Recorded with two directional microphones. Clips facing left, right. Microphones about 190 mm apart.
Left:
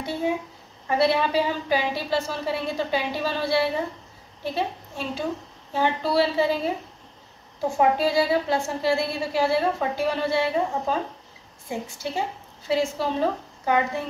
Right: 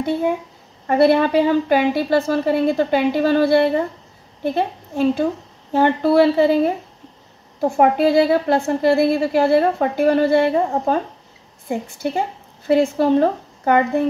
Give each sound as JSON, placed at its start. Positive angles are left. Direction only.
{"t": 0.8, "sound": "a woman's voice", "side_deg": -55}